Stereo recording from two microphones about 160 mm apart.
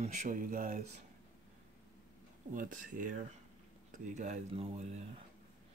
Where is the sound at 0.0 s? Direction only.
50° right (ahead or behind).